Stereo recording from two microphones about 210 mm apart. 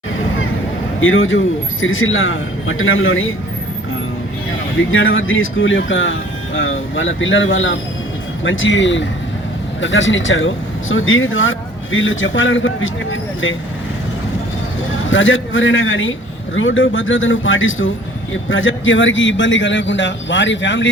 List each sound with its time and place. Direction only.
0.9 s speech: 75° left (ahead or behind)
4.9 s speech: 70° left (ahead or behind)
15.1 s speech: 65° left (ahead or behind)